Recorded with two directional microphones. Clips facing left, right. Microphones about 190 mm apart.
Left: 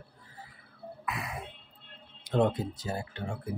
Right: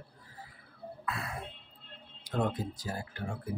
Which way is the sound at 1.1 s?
20° left (ahead or behind).